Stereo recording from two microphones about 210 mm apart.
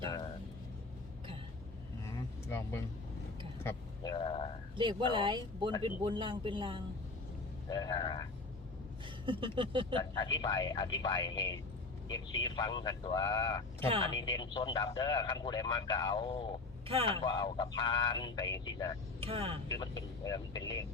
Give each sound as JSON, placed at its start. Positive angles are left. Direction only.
{"t": 2.0, "sound": "vehicle", "side_deg": 15}
{"t": 4.8, "sound": "speech", "side_deg": -25}
{"t": 7.7, "sound": "a man's voice", "side_deg": 20}
{"t": 9.0, "sound": "speech", "side_deg": -25}
{"t": 10.0, "sound": "a man's voice", "side_deg": 20}
{"t": 13.7, "sound": "speech", "side_deg": -25}
{"t": 14.2, "sound": "a man's voice", "side_deg": 20}
{"t": 16.9, "sound": "speech", "side_deg": -25}
{"t": 17.2, "sound": "a man's voice", "side_deg": 20}
{"t": 19.2, "sound": "speech", "side_deg": -25}
{"t": 19.6, "sound": "a man's voice", "side_deg": 20}